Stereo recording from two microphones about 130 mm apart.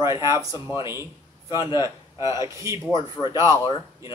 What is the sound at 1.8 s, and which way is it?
Speech, 25° right (ahead or behind).